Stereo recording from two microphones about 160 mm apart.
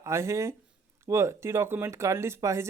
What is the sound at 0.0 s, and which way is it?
Speech, 20° right (ahead or behind).